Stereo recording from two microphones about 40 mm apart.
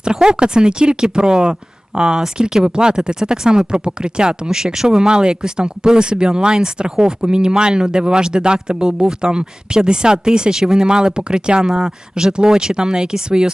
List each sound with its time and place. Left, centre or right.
0.0 s speech: centre
4.4 s speech: centre